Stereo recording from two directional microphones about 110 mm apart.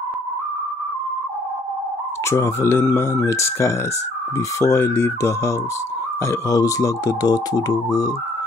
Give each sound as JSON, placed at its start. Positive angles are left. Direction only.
{"t": 2.2, "sound": "speech", "side_deg": 25}